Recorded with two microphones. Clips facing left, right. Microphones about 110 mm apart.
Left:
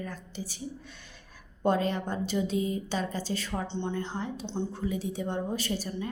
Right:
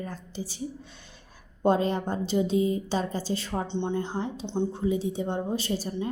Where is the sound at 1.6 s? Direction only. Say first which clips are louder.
Right 3 dB; 30° right (ahead or behind).